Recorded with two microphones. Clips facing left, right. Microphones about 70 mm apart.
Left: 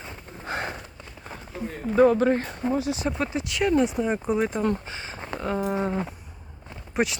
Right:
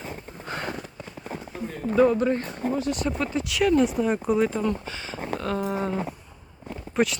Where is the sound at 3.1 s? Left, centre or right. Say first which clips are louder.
Even; left.